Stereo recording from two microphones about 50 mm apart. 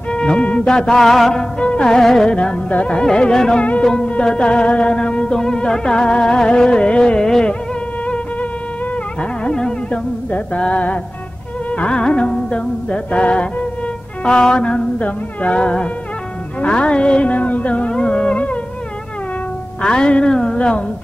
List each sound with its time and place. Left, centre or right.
0.1 s music: left; by 1.3 s centre
1.3 s music: centre
9.4 s music: centre
10.3 s music: left
19.8 s music: centre